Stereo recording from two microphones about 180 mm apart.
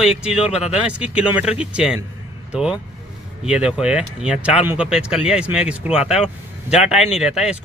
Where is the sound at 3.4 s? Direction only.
5° right (ahead or behind).